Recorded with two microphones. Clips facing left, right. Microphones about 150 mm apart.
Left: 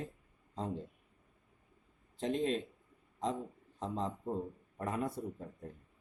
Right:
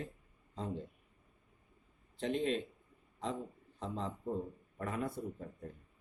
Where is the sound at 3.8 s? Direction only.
40° left (ahead or behind).